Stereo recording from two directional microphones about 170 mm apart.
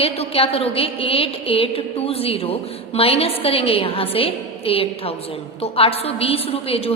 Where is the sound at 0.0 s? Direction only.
35° left (ahead or behind).